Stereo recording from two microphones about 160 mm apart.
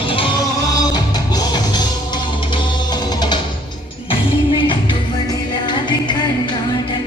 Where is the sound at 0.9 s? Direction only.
25° left (ahead or behind).